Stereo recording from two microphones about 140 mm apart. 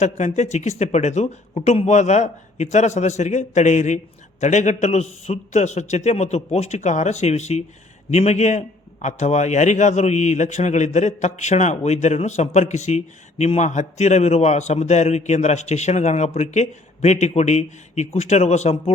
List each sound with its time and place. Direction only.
0.0 s a man's voice: 55° left (ahead or behind)